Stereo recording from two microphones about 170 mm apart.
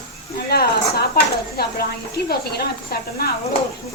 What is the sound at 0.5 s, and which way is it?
A woman's voice, 65° left (ahead or behind).